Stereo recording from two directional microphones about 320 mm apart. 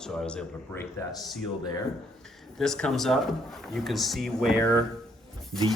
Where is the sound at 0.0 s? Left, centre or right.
Centre.